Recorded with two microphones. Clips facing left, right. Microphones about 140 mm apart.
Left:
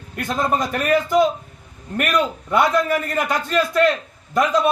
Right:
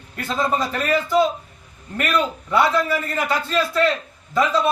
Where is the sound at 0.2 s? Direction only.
15° left (ahead or behind).